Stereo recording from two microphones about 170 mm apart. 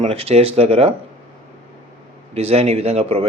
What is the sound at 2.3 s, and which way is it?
Speech, 35° right (ahead or behind).